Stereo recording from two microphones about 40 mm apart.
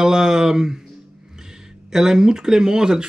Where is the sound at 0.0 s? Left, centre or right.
Centre.